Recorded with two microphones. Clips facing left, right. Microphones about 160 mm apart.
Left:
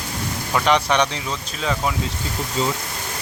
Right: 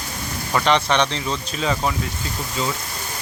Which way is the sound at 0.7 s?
10° left (ahead or behind).